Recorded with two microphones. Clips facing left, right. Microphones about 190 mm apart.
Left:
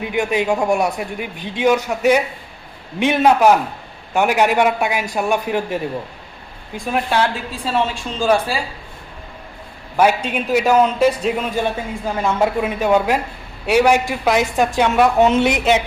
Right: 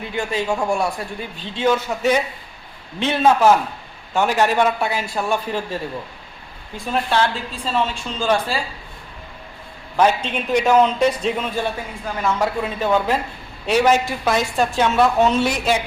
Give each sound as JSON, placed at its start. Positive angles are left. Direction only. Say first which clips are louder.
{"t": 0.0, "sound": "a man's voice", "louder": "left 5 dB", "side_deg": 15}
{"t": 6.9, "sound": "a man's voice", "louder": "left 1 dB", "side_deg": 10}
{"t": 10.0, "sound": "a man's voice", "louder": "left 2 dB", "side_deg": 10}